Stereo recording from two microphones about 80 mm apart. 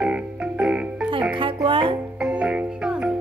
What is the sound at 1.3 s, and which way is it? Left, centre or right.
Music, right.